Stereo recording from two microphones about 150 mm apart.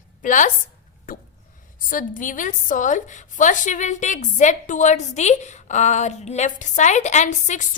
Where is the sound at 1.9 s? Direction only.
65° left (ahead or behind).